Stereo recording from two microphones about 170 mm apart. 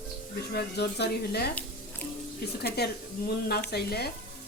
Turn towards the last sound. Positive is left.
turn(degrees=70)  # may be behind; listen again after turning